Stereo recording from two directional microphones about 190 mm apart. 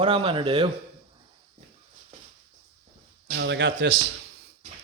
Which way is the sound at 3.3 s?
70° right (ahead or behind).